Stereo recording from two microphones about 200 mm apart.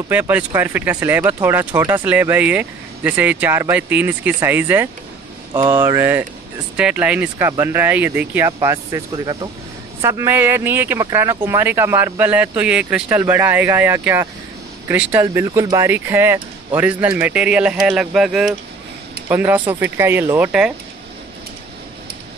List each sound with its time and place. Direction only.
0.1 s speech: 10° right (ahead or behind)